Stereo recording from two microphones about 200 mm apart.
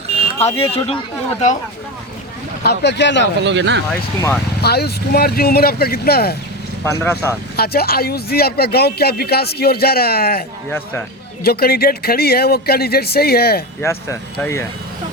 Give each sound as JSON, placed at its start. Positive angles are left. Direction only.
{"t": 0.3, "sound": "speech", "side_deg": 30}
{"t": 2.6, "sound": "speech", "side_deg": 60}
{"t": 3.4, "sound": "speech", "side_deg": -60}
{"t": 4.6, "sound": "speech", "side_deg": 55}
{"t": 6.8, "sound": "speech", "side_deg": 10}
{"t": 7.5, "sound": "speech", "side_deg": 50}
{"t": 10.7, "sound": "speech", "side_deg": 10}
{"t": 11.4, "sound": "speech", "side_deg": 50}
{"t": 13.8, "sound": "speech", "side_deg": 15}